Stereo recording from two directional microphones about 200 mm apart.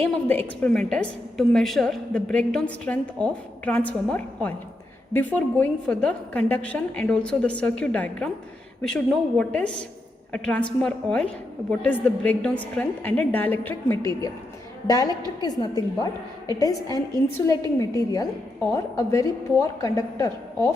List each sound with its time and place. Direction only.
0.0 s a woman's voice: 10° left (ahead or behind)